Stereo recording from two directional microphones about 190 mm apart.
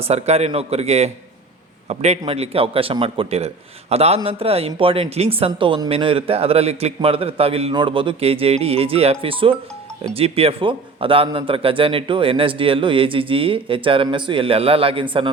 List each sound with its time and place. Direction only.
0.0 s a man's voice: 35° right (ahead or behind)